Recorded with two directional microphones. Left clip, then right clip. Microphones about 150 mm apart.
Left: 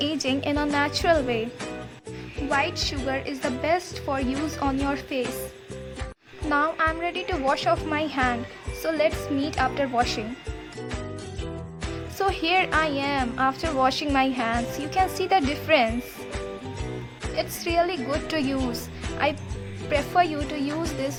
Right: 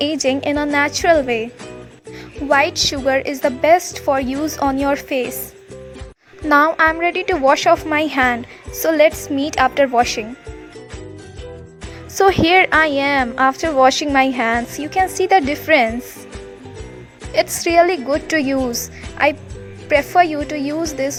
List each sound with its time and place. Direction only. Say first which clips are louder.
0.0 s a woman's voice: right 8 dB; 45° right (ahead or behind)
2.5 s a woman's voice: right 10 dB; 50° right (ahead or behind)
6.5 s a woman's voice: right 10 dB; 60° right (ahead or behind); by 10.2 s 45° right (ahead or behind)
12.1 s a woman's voice: right 11 dB; 55° right (ahead or behind)
14.8 s a woman's voice: right 7 dB; 35° right (ahead or behind)
17.3 s a woman's voice: right 11 dB; 55° right (ahead or behind); by 21.1 s 40° right (ahead or behind)